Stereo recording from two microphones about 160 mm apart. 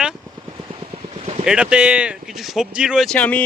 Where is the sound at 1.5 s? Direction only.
5° right (ahead or behind).